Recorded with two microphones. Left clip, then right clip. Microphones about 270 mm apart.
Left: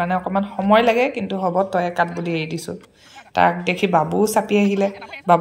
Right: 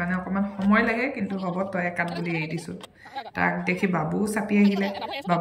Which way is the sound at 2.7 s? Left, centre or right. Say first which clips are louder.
Left 7 dB; left.